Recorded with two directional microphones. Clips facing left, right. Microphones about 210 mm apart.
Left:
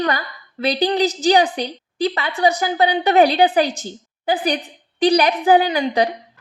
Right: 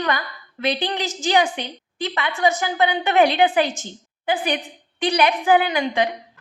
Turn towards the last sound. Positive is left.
turn(degrees=35)  # may be behind; listen again after turning